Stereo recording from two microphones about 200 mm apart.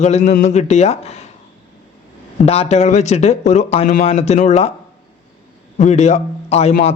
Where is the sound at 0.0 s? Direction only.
35° left (ahead or behind).